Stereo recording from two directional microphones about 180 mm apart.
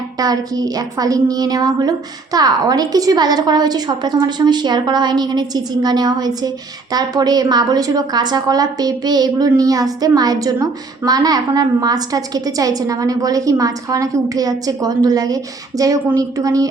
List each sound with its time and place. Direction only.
0.2 s a woman's voice: 20° right (ahead or behind)